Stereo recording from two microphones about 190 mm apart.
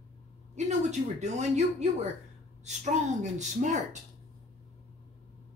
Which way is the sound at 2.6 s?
40° right (ahead or behind).